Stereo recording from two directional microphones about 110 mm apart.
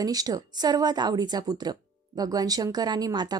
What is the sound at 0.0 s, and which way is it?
A woman's voice, 35° right (ahead or behind).